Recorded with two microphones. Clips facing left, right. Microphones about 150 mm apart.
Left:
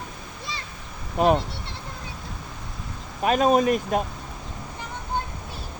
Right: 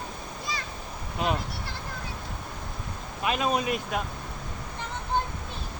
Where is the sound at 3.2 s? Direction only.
45° left (ahead or behind).